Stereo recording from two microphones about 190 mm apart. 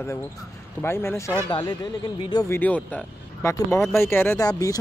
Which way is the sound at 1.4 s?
25° left (ahead or behind).